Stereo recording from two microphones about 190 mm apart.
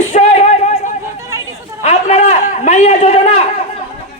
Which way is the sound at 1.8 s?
35° left (ahead or behind).